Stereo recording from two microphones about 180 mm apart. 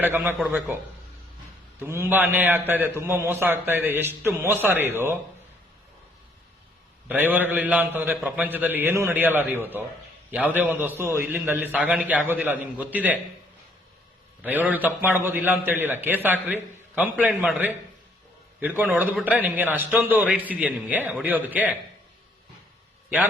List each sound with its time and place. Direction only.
0.0 s a man's voice: 10° right (ahead or behind)
1.8 s a man's voice: 10° right (ahead or behind)
7.1 s a man's voice: 10° right (ahead or behind)
14.4 s a man's voice: 10° right (ahead or behind)